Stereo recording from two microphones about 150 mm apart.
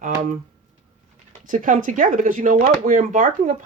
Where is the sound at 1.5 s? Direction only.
60° right (ahead or behind).